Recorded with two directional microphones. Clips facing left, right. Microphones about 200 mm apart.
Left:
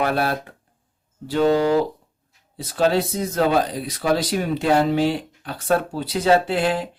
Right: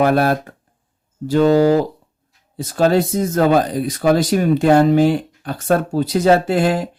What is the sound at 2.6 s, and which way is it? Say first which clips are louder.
Speech: right 4 dB; 45° right (ahead or behind).